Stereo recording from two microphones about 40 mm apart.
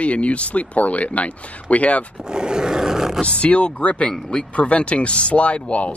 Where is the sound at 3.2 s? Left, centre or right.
Left.